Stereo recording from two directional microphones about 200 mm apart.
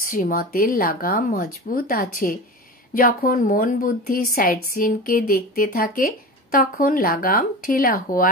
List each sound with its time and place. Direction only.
0.0 s speech: 45° left (ahead or behind)